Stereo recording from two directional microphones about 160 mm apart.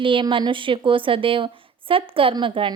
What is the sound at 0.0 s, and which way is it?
A woman's voice, 30° right (ahead or behind).